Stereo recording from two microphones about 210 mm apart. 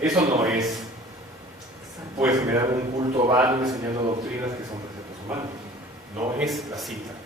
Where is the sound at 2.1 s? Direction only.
15° right (ahead or behind).